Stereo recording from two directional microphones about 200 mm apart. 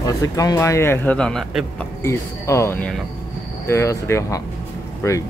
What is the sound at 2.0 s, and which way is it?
Speech, 15° left (ahead or behind).